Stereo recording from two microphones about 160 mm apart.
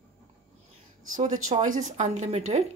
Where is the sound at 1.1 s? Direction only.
50° right (ahead or behind).